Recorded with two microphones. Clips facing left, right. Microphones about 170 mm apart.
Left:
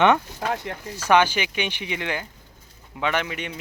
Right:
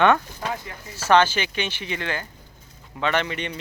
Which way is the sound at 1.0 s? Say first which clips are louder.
Right 1 dB; 10° left (ahead or behind).